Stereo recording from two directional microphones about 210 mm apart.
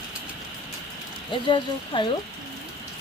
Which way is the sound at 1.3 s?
25° left (ahead or behind).